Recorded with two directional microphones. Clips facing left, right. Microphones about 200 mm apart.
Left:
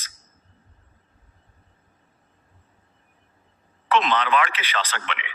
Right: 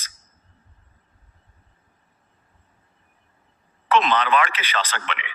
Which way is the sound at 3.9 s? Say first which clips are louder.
Right 2 dB; 40° right (ahead or behind).